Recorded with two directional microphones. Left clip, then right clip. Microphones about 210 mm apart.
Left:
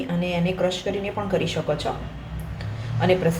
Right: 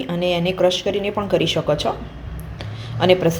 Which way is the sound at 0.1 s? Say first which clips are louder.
Right 7 dB; 40° right (ahead or behind).